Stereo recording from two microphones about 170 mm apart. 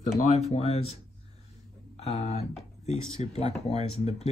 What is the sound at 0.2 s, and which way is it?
Speech, 40° left (ahead or behind).